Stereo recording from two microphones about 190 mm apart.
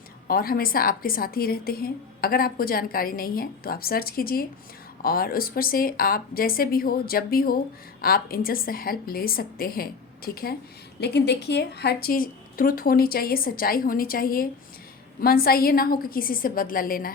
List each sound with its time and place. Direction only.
0.3 s a woman's voice: 50° left (ahead or behind)